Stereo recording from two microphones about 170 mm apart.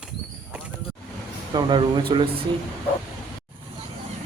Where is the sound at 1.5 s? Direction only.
30° right (ahead or behind).